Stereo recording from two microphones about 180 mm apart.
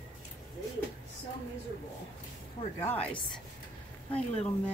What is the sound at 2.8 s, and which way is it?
Speech, 10° left (ahead or behind).